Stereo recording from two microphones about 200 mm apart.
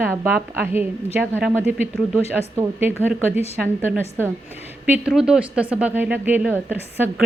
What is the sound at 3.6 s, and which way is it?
A woman's voice, 10° right (ahead or behind).